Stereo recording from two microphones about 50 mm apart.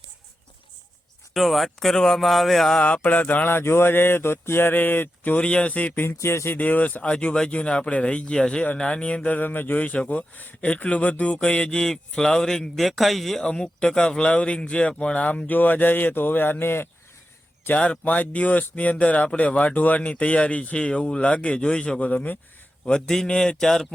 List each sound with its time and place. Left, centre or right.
1.3 s speech: centre
2.7 s speech: left
3.5 s speech: left
5.4 s speech: centre
5.9 s speech: left
6.1 s speech: left
6.6 s a man's voice: left; by 13.4 s centre
13.4 s speech: centre
15.4 s speech: left
17.7 s speech: left
18.0 s speech: left
22.0 s speech: left
22.9 s a man's voice: centre